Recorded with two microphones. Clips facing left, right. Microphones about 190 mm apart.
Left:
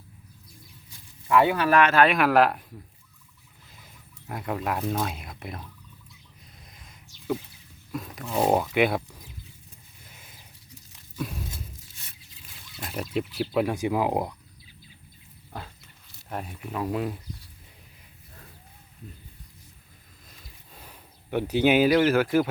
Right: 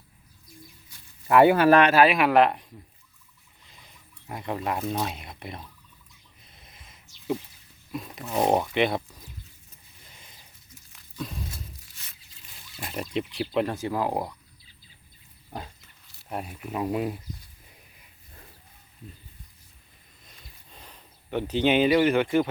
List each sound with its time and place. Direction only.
1.5 s speech: 25° right (ahead or behind)
1.9 s speech: 5° right (ahead or behind)
4.3 s speech: centre (ahead or behind)
6.6 s a sound: centre (ahead or behind)
7.9 s speech: centre (ahead or behind)
12.7 s speech: centre (ahead or behind); by 14.3 s 15° left (ahead or behind)
16.3 s speech: 10° right (ahead or behind)
20.7 s speech: 10° left (ahead or behind)